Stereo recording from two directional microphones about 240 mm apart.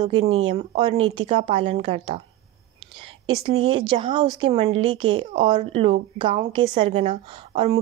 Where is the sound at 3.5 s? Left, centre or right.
Right.